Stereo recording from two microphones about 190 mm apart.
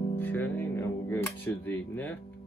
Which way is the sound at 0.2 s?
10° left (ahead or behind).